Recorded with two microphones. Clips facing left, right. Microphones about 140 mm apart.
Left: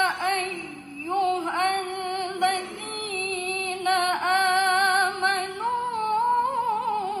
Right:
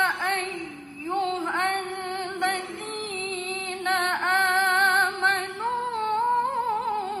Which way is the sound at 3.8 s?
15° left (ahead or behind).